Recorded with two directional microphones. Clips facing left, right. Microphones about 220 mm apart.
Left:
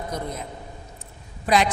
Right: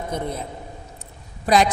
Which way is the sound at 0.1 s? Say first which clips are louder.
Right 5 dB; 30° right (ahead or behind).